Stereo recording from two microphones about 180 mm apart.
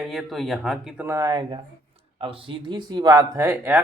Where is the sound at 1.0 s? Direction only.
15° right (ahead or behind).